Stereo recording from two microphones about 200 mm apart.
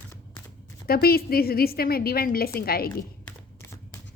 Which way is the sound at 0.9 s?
50° left (ahead or behind).